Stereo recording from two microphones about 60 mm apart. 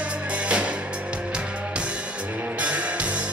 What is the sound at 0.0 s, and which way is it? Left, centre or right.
Music, right.